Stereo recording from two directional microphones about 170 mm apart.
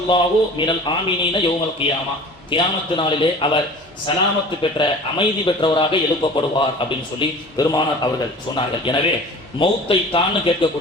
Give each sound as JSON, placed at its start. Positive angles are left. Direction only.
{"t": 0.1, "sound": "a man's voice", "side_deg": 30}